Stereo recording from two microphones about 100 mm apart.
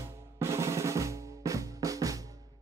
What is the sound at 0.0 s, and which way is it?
Drum, 30° right (ahead or behind).